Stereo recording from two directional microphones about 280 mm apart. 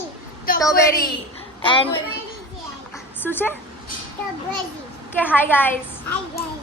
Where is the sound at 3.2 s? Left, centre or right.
Centre.